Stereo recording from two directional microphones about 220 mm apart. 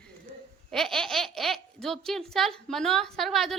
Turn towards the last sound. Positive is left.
turn(degrees=0)  # may be behind; listen again after turning